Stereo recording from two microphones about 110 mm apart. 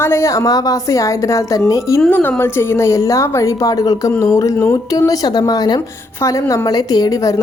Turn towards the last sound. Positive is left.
turn(degrees=30)  # may be behind; listen again after turning